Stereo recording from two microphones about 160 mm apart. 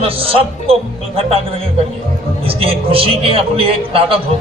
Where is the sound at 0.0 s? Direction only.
35° right (ahead or behind).